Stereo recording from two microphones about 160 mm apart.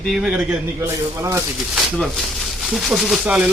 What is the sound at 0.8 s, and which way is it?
Speech, 20° right (ahead or behind).